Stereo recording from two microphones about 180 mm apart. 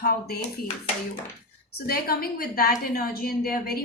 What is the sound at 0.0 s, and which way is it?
Speech, 60° left (ahead or behind).